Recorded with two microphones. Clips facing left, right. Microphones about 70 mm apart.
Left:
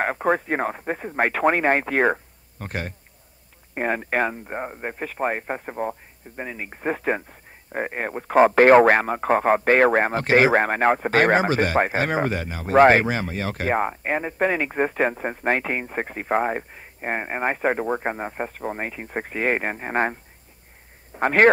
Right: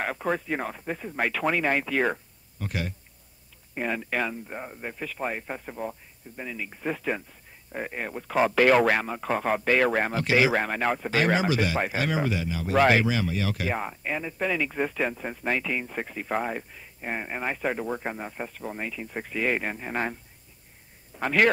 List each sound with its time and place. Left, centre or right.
0.0 s a man's voice: left